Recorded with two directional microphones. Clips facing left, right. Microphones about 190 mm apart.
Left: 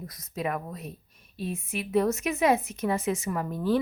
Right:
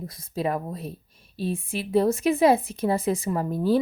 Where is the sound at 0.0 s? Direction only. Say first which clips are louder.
Right 4 dB; 30° right (ahead or behind).